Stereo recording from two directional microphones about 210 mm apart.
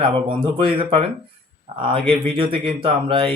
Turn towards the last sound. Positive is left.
turn(degrees=-25)  # may be behind; listen again after turning